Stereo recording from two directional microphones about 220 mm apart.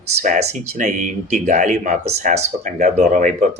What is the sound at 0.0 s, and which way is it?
Speech, 30° right (ahead or behind).